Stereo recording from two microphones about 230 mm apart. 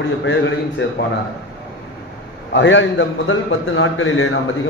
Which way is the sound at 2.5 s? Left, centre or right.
Left.